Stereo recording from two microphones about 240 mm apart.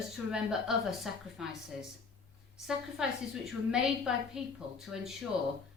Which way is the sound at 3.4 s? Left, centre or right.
Centre.